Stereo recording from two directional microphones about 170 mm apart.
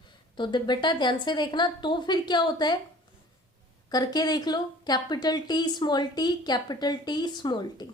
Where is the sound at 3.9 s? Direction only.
25° left (ahead or behind).